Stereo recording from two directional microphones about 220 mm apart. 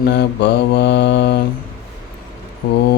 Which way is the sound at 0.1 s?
50° left (ahead or behind).